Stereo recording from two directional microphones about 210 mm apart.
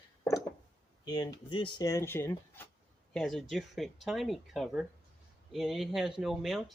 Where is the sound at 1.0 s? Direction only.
20° left (ahead or behind); by 6.7 s centre (ahead or behind).